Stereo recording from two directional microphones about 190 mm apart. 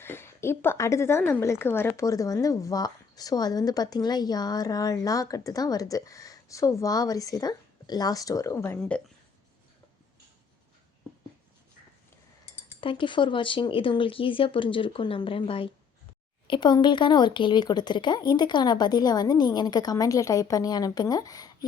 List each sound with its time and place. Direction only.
0.0 s speech: 10° left (ahead or behind)
12.8 s speech: 25° left (ahead or behind)